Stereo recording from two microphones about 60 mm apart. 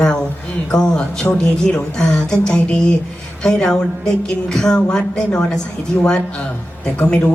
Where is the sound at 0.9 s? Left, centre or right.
Centre.